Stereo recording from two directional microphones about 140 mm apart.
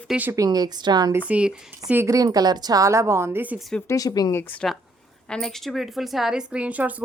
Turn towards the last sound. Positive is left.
turn(degrees=-10)  # may be behind; listen again after turning